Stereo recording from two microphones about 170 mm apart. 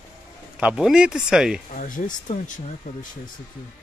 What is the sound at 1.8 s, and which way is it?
Speech, 50° left (ahead or behind).